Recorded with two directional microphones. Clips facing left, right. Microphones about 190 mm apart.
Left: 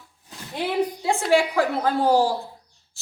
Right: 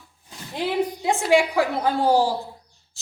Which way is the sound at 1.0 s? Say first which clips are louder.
Right 2 dB; 15° right (ahead or behind).